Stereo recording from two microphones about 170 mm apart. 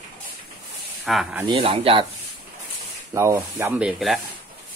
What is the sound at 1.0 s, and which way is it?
Speech, centre (ahead or behind).